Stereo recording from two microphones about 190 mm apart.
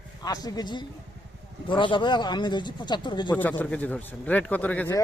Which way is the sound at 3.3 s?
10° left (ahead or behind).